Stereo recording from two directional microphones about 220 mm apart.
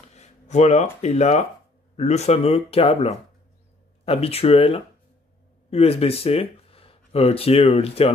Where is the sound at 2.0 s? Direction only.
30° left (ahead or behind).